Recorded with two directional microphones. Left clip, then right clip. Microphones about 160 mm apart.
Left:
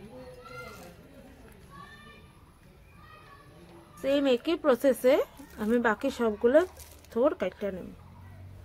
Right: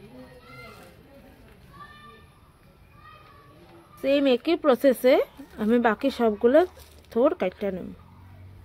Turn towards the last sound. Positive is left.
turn(degrees=-45)  # may be behind; listen again after turning